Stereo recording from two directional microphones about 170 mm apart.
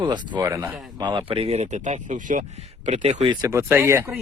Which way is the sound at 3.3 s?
20° right (ahead or behind).